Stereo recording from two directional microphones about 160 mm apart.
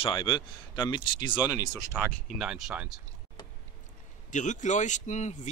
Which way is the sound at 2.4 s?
5° right (ahead or behind).